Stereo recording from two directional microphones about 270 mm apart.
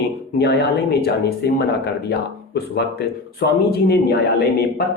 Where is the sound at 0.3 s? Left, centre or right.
Left.